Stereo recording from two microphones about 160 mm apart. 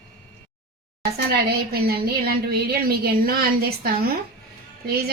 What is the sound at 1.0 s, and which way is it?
Speech, 75° right (ahead or behind).